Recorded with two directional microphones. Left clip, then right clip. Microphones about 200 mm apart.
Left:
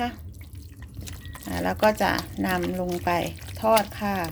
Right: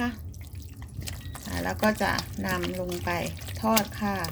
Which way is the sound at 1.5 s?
50° left (ahead or behind).